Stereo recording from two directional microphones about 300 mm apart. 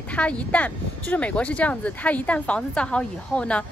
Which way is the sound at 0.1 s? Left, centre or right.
Centre.